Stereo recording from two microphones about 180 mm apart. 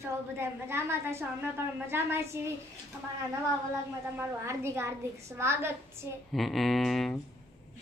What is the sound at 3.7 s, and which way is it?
A woman's voice, 15° right (ahead or behind).